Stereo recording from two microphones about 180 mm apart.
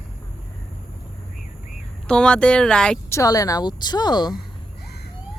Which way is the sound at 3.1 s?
20° left (ahead or behind).